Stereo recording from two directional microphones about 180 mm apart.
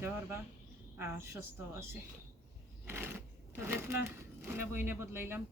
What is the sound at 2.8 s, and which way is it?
Speech, 15° right (ahead or behind).